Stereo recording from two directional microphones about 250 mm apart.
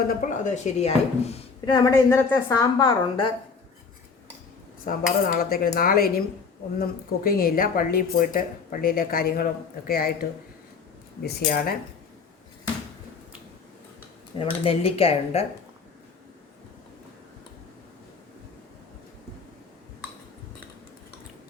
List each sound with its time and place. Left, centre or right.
0.1 s speech: left
5.2 s speech: left
14.3 s speech: left